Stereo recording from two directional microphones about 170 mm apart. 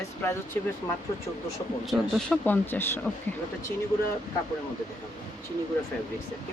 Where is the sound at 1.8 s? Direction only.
Centre (ahead or behind).